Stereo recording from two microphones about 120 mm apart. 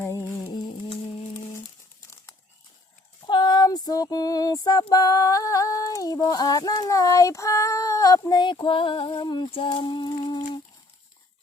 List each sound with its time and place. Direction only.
0.0 s music: 20° left (ahead or behind)
1.5 s crumpling: 25° left (ahead or behind)
3.2 s female singing: 40° left (ahead or behind)